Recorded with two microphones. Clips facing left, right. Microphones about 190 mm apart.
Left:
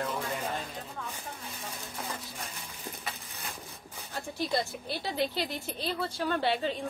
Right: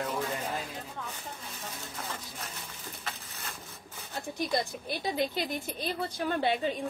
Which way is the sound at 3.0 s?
15° left (ahead or behind).